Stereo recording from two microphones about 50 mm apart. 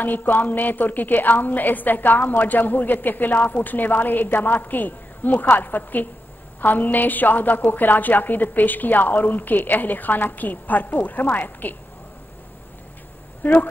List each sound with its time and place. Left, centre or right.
0.0 s a woman's voice: left
13.4 s speech: left